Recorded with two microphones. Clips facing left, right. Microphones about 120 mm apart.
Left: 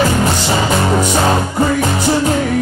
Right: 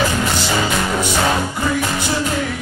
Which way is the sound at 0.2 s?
40° left (ahead or behind).